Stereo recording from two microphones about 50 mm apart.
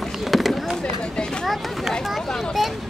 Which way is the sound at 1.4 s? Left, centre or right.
Centre.